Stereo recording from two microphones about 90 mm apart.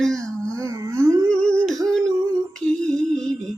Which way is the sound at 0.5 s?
40° right (ahead or behind).